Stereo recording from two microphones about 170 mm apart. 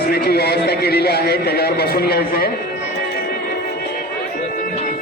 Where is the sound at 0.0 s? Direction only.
65° left (ahead or behind).